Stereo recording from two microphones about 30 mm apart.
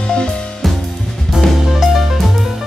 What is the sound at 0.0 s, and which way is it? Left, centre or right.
Music, left.